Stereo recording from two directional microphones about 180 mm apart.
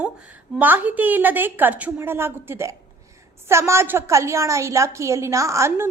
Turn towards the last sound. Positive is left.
turn(degrees=-15)  # may be behind; listen again after turning